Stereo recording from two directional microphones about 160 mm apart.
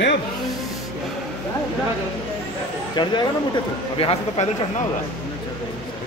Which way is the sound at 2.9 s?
30° left (ahead or behind).